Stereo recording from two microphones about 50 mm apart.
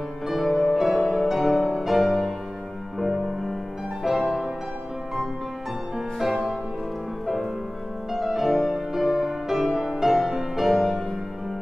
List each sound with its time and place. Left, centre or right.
0.3 s music: centre
4.1 s music: centre
5.9 s music: centre
8.1 s music: centre